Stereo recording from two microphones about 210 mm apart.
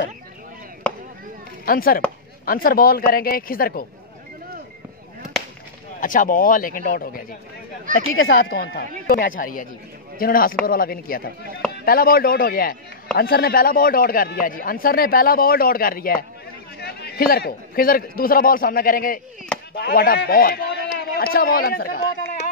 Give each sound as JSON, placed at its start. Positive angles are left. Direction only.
{"t": 1.7, "sound": "a man's voice", "side_deg": 45}
{"t": 5.9, "sound": "speech", "side_deg": 40}
{"t": 8.2, "sound": "a man's voice", "side_deg": 45}